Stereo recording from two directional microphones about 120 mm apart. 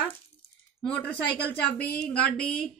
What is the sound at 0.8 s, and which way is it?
A woman's voice, 10° left (ahead or behind).